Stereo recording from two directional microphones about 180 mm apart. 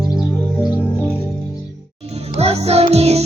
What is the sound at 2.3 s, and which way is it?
Music, 35° right (ahead or behind).